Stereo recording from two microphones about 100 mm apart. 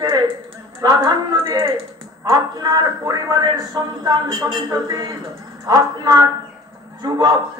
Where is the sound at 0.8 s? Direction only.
40° right (ahead or behind).